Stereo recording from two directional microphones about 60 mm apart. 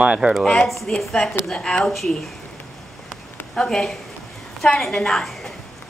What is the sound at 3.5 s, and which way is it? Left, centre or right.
A woman's voice, centre.